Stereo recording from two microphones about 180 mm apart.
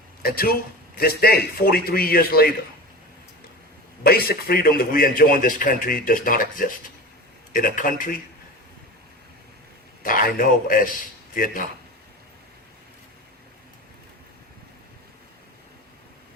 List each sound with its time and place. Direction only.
0.2 s a man's voice: 55° left (ahead or behind)
4.0 s a man's voice: 60° left (ahead or behind)
10.0 s a man's voice: 50° left (ahead or behind)